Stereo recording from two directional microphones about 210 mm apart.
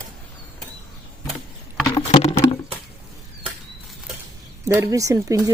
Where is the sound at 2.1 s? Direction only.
30° left (ahead or behind).